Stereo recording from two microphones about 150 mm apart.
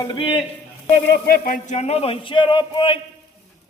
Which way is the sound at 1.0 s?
90° left.